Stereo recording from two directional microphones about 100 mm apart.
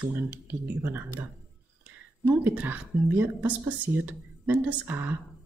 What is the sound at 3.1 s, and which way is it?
Speech, 15° right (ahead or behind).